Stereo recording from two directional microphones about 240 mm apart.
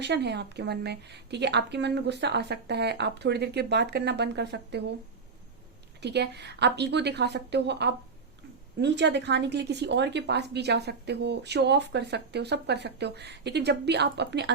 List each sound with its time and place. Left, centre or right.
0.0 s a woman's voice: right
6.0 s a woman's voice: right